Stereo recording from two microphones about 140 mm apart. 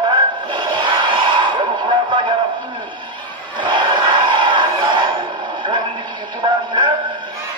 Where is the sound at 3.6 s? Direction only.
35° right (ahead or behind).